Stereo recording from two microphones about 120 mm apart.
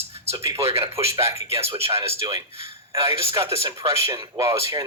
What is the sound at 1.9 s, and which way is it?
Speech, 25° right (ahead or behind).